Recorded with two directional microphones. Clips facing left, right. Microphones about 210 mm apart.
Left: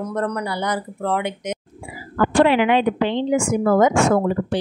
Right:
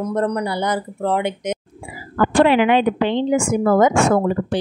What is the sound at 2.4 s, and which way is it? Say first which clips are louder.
Speech: right 2 dB; 50° right (ahead or behind).